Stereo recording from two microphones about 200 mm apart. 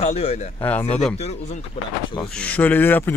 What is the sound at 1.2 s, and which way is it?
Speech, 35° left (ahead or behind).